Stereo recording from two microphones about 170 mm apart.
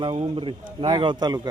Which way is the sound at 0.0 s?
30° right (ahead or behind).